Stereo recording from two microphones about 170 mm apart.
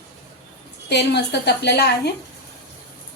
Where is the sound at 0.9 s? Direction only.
80° left.